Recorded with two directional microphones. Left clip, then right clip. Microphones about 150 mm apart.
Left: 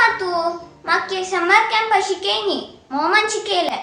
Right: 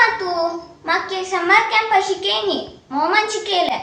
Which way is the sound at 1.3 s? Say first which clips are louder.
Left 1 dB; 20° left (ahead or behind).